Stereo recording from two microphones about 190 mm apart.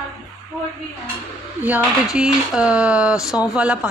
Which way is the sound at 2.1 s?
5° right (ahead or behind).